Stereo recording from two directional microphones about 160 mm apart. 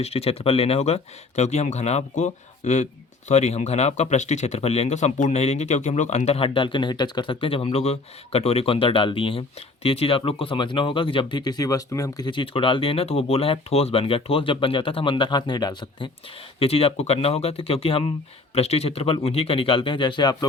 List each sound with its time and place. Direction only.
0.0 s speech: 40° left (ahead or behind)